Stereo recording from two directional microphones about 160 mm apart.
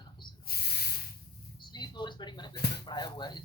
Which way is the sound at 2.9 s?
25° left (ahead or behind).